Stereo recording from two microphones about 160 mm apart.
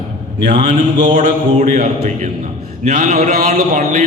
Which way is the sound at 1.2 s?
50° right (ahead or behind).